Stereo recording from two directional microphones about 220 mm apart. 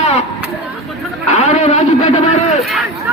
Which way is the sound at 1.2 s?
35° left (ahead or behind).